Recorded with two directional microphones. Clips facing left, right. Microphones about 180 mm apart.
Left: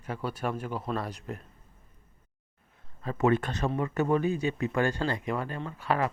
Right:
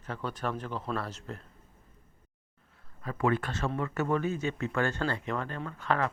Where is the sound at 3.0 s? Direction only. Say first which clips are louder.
Left 3 dB; 25° left (ahead or behind).